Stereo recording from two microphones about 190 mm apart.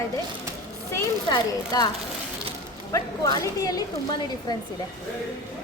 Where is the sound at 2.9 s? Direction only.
20° left (ahead or behind).